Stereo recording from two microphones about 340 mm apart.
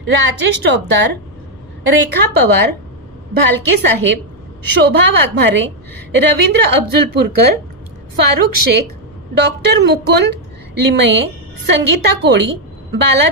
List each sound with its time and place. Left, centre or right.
0.0 s a woman's voice: right